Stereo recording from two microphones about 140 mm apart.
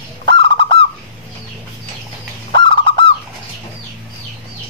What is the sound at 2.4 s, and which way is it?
Goose, 35° left (ahead or behind).